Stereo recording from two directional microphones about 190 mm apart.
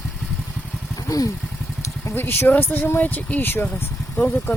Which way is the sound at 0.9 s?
20° left (ahead or behind).